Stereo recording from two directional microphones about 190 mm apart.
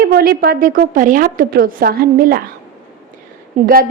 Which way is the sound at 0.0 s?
50° right (ahead or behind).